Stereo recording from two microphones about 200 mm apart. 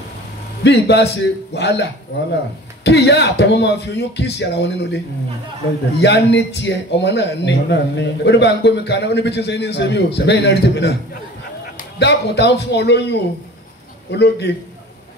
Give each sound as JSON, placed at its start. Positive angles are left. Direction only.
{"t": 0.7, "sound": "speech", "side_deg": 55}
{"t": 12.0, "sound": "speech", "side_deg": 55}